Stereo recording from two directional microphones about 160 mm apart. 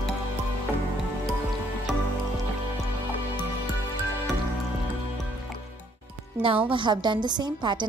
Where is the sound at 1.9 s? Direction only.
Centre (ahead or behind).